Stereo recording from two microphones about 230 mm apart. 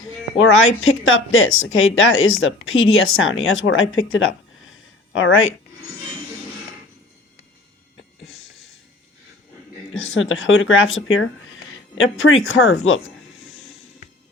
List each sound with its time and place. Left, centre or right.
0.3 s speech: left
9.9 s speech: left
13.5 s music: left